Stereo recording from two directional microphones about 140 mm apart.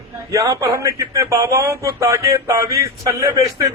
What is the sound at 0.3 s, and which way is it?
A man's voice, 20° right (ahead or behind).